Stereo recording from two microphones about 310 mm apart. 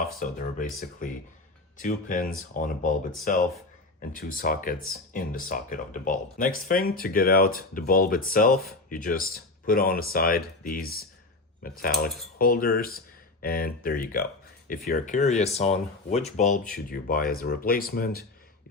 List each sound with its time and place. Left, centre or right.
0.2 s speech: left